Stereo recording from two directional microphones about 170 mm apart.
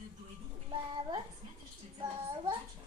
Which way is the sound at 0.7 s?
30° right (ahead or behind).